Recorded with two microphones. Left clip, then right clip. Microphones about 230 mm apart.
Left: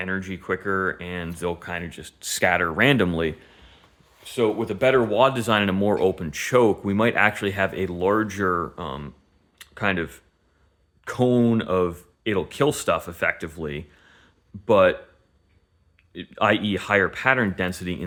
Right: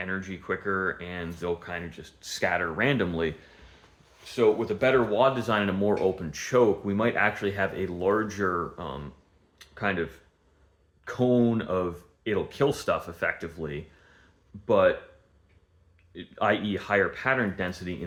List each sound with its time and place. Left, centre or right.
0.0 s speech: left
9.6 s a sound: left
11.0 s speech: left
16.1 s speech: left